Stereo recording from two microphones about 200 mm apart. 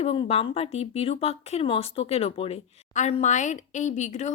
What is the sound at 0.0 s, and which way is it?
Speech, 30° left (ahead or behind).